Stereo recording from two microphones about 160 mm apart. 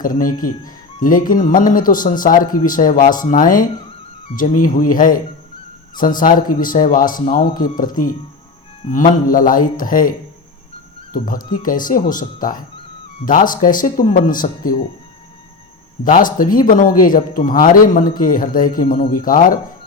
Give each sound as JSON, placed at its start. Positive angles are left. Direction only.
{"t": 0.0, "sound": "a man's voice", "side_deg": 60}
{"t": 16.0, "sound": "a man's voice", "side_deg": 60}